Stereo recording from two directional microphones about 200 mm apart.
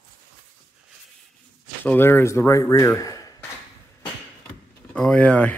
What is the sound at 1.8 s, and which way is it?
Speech, 10° left (ahead or behind).